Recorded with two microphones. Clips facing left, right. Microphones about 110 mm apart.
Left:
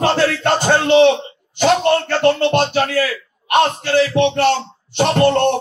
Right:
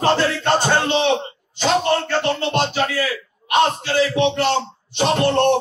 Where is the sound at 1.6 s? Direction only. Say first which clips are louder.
Left 4 dB; 60° left (ahead or behind).